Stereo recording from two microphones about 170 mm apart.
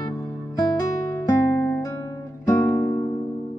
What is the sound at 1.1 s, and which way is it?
Music, 15° left (ahead or behind).